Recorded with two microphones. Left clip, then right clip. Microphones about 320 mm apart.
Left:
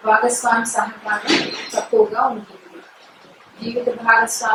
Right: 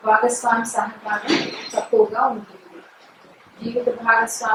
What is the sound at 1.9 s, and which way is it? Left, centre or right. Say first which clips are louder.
Speech: left 1 dB; centre.